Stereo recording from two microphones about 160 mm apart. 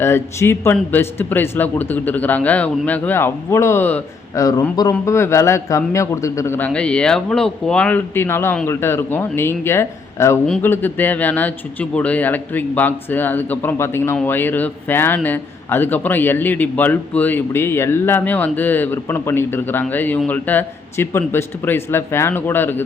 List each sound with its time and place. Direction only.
0.0 s a man's voice: 15° left (ahead or behind)